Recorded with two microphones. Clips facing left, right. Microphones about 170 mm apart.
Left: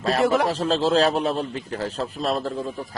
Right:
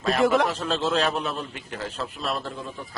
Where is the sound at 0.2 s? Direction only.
Centre (ahead or behind).